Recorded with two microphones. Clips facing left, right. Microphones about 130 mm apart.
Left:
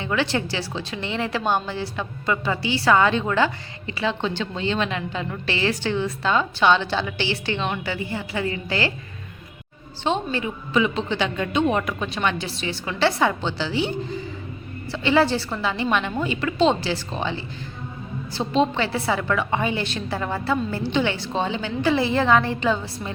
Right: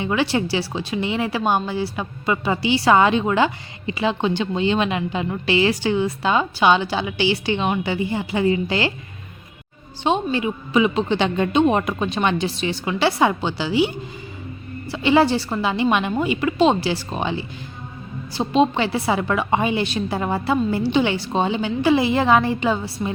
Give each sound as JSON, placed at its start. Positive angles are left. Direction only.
{"t": 0.0, "sound": "speech", "side_deg": -15}
{"t": 10.0, "sound": "speech", "side_deg": -15}
{"t": 14.9, "sound": "speech", "side_deg": -15}